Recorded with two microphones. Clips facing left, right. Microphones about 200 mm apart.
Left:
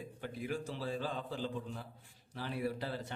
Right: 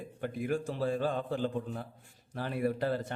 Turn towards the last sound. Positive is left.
turn(degrees=-50)  # may be behind; listen again after turning